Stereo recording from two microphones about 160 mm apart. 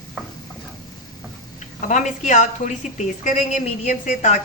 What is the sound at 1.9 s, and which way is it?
Speech, 50° left (ahead or behind).